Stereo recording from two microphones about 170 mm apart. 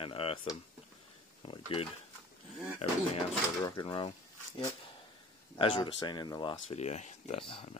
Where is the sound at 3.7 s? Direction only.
25° left (ahead or behind).